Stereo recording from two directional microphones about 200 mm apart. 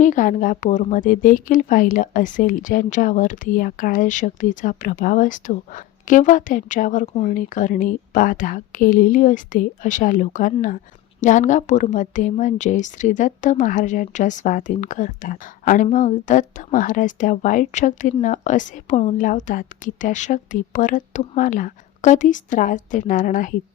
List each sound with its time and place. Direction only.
0.0 s a woman's voice: 40° left (ahead or behind)